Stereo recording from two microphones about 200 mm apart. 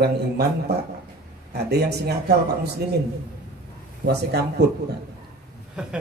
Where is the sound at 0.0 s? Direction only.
55° right (ahead or behind).